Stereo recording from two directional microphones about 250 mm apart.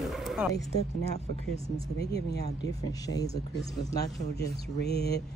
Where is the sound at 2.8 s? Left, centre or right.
Centre.